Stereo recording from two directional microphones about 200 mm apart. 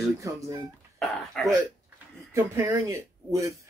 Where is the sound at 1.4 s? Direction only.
5° left (ahead or behind).